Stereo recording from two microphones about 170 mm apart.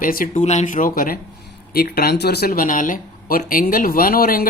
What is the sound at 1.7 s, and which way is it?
Speech, 65° left (ahead or behind).